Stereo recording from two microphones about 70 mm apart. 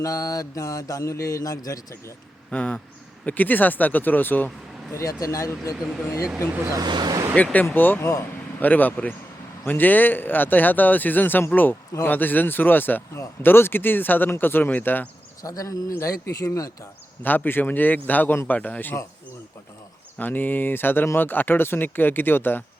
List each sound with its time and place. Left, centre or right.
0.0 s speech: left
2.5 s speech: centre
5.2 s speech: left
6.7 s speech: right
7.3 s speech: left
15.4 s speech: left
17.2 s speech: left
20.1 s speech: left